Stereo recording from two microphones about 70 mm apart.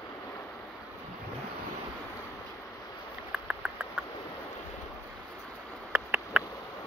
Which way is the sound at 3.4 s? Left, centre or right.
Centre.